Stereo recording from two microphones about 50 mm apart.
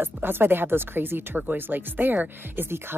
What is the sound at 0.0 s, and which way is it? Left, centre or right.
Speech, right.